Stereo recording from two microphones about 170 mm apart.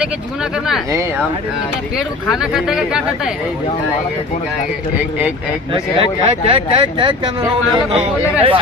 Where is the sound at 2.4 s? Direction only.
5° right (ahead or behind).